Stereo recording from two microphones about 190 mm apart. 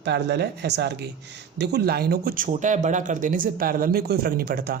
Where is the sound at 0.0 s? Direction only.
65° right (ahead or behind).